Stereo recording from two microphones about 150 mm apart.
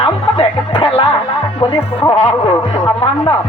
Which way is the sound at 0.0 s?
35° left (ahead or behind).